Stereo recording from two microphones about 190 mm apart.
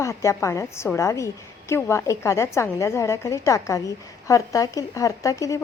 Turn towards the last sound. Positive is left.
turn(degrees=15)  # may be behind; listen again after turning